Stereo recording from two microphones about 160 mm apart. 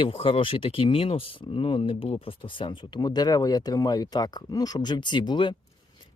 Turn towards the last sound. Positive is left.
turn(degrees=30)  # may be behind; listen again after turning